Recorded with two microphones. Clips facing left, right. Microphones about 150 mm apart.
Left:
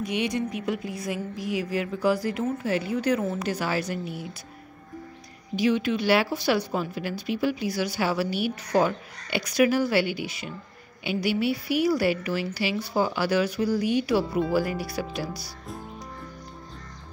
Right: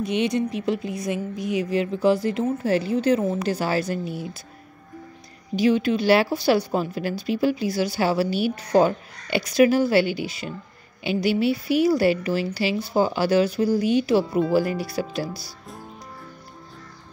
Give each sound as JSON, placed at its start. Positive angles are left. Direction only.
{"t": 0.0, "sound": "speech", "side_deg": -25}
{"t": 2.6, "sound": "speech", "side_deg": -35}
{"t": 5.6, "sound": "speech", "side_deg": -35}